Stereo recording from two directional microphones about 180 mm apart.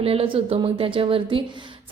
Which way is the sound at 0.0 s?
30° right (ahead or behind).